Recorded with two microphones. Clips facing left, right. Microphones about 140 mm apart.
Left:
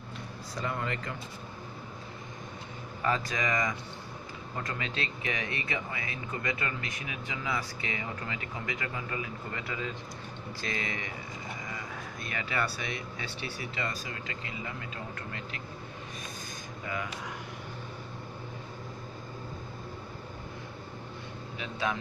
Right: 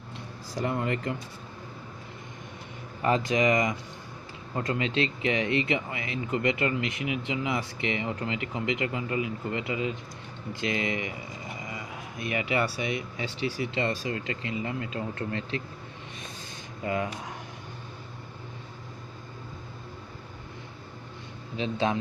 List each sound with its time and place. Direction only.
0.5 s speech: 25° right (ahead or behind)
3.0 s speech: 25° right (ahead or behind)
12.2 s speech: 15° right (ahead or behind)
16.8 s speech: 30° right (ahead or behind)
21.6 s speech: 30° right (ahead or behind)